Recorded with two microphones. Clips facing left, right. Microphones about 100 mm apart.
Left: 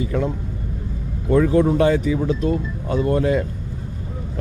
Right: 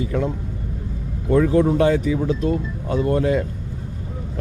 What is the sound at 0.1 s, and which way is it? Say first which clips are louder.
Speech: even; 20° left (ahead or behind).